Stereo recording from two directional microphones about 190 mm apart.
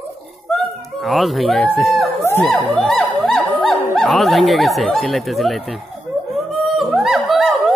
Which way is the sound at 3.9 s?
Centre (ahead or behind).